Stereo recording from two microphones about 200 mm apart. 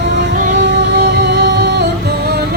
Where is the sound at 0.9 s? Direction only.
60° right (ahead or behind).